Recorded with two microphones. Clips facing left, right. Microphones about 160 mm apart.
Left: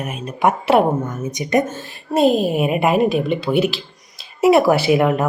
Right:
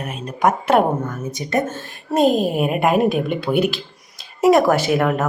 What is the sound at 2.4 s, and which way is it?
Speech, 5° left (ahead or behind).